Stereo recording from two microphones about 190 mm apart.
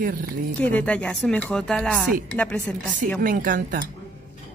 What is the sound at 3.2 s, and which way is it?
Speech, 45° right (ahead or behind).